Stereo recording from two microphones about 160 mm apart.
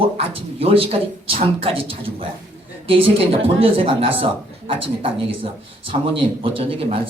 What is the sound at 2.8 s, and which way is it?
Speech, 35° right (ahead or behind).